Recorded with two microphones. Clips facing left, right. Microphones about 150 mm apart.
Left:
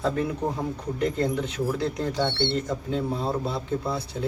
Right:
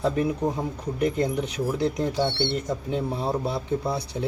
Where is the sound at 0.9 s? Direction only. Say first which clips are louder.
Right 2 dB; 15° right (ahead or behind).